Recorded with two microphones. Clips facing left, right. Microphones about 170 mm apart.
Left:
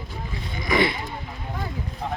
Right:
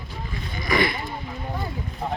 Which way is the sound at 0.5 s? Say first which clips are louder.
Left 1 dB; 20° left (ahead or behind).